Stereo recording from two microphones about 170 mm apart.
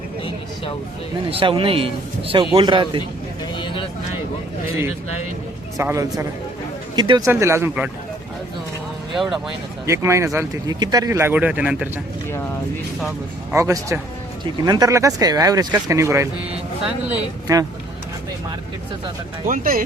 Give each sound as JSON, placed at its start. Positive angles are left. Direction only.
{"t": 1.3, "sound": "a man's voice", "side_deg": -35}
{"t": 3.6, "sound": "a sound", "side_deg": 30}
{"t": 5.7, "sound": "speech", "side_deg": -20}
{"t": 7.3, "sound": "speech", "side_deg": -15}
{"t": 9.1, "sound": "speech", "side_deg": 0}
{"t": 9.8, "sound": "speech", "side_deg": -15}
{"t": 13.5, "sound": "speech", "side_deg": -15}
{"t": 17.5, "sound": "speech", "side_deg": -20}
{"t": 19.5, "sound": "speech", "side_deg": -55}